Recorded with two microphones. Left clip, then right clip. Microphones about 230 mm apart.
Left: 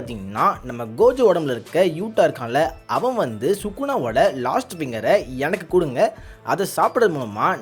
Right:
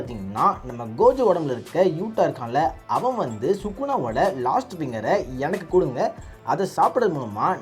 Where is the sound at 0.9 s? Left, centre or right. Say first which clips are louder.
Left 2 dB; left.